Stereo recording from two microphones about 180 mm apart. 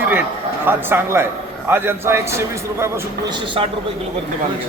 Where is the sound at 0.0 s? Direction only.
10° right (ahead or behind).